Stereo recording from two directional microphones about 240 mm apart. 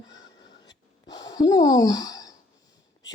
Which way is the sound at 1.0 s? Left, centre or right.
Centre.